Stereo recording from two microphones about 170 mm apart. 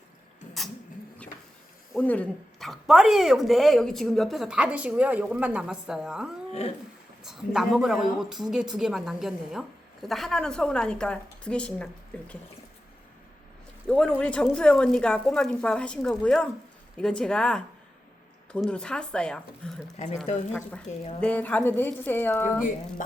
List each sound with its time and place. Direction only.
1.9 s speech: 10° left (ahead or behind)
6.5 s a sound: 35° left (ahead or behind)
7.3 s speech: centre (ahead or behind)
13.8 s speech: 5° left (ahead or behind)
23.0 s music: 50° left (ahead or behind)